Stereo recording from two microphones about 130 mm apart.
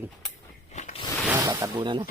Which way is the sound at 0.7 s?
65° left (ahead or behind).